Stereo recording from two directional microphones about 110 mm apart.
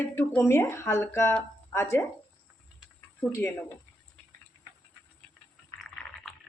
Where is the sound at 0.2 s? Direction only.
25° left (ahead or behind).